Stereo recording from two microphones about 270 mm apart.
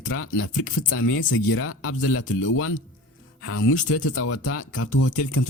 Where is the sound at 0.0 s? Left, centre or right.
Left.